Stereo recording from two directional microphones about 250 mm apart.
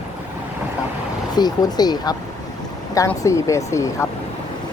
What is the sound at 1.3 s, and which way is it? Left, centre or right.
Speech, centre.